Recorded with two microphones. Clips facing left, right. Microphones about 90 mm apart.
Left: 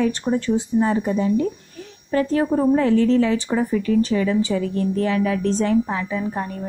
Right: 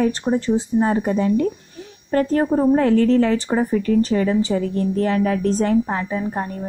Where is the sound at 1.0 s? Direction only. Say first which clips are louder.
Right 1 dB; 55° right (ahead or behind).